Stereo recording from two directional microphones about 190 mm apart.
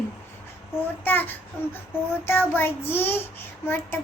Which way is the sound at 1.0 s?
10° left (ahead or behind).